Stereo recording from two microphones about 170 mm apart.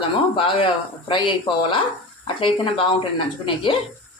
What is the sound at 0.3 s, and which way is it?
Speech, 30° left (ahead or behind).